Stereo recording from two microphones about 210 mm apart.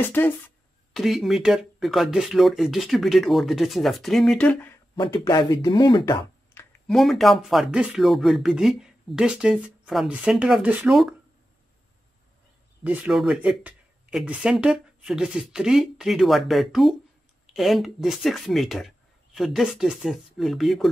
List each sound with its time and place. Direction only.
0.0 s speech: 10° left (ahead or behind)
0.9 s speech: centre (ahead or behind)
4.9 s speech: 25° left (ahead or behind)
6.6 s a sound: 10° left (ahead or behind)
6.9 s speech: centre (ahead or behind)
12.8 s speech: 5° right (ahead or behind)